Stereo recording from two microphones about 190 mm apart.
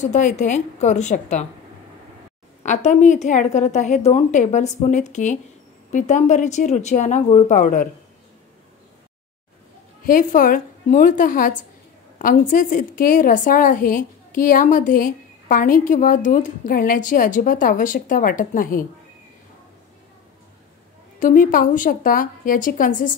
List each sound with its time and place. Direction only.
0.0 s a woman's voice: 40° left (ahead or behind)
2.6 s a woman's voice: 40° left (ahead or behind)
10.0 s a woman's voice: 45° left (ahead or behind)
21.2 s a woman's voice: 45° left (ahead or behind)